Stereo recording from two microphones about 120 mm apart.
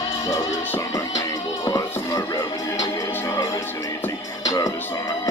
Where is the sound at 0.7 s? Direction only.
25° left (ahead or behind).